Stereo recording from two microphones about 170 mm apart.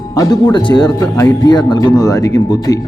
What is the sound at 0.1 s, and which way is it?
Speech, 20° left (ahead or behind).